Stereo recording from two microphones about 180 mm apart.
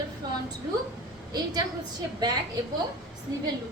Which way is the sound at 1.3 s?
20° right (ahead or behind).